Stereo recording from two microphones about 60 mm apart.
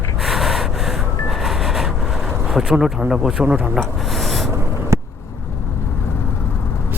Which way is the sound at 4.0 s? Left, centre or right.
Centre.